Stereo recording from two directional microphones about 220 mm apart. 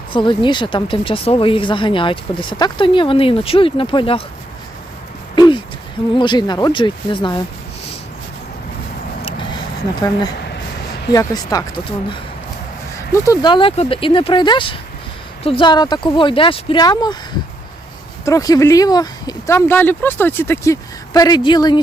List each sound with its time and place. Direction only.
0.1 s speech: 20° left (ahead or behind)
5.3 s a sound: 20° left (ahead or behind)
6.1 s speech: 20° left (ahead or behind)
9.2 s vehicle: 20° left (ahead or behind)
10.0 s speech: 20° left (ahead or behind)
18.3 s speech: 15° left (ahead or behind)